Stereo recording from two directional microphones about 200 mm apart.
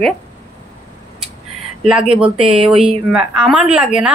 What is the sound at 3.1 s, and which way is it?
Speech, 5° right (ahead or behind).